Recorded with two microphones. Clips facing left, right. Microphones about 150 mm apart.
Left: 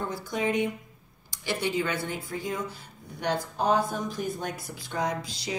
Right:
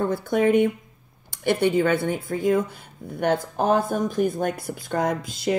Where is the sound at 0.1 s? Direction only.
55° right (ahead or behind).